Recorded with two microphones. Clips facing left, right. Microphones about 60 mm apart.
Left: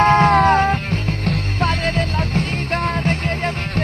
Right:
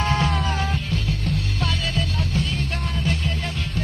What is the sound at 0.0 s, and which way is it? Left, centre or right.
Music, left.